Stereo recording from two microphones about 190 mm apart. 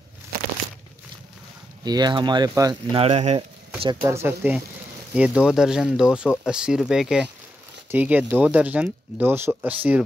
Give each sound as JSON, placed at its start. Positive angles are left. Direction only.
{"t": 1.9, "sound": "speech", "side_deg": -20}
{"t": 3.0, "sound": "speech", "side_deg": -35}
{"t": 4.0, "sound": "speech", "side_deg": -15}